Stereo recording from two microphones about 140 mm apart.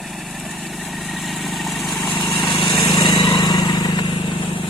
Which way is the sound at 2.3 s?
30° left (ahead or behind).